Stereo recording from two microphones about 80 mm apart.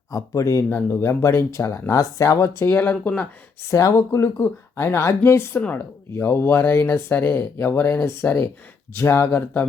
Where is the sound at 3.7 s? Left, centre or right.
Left.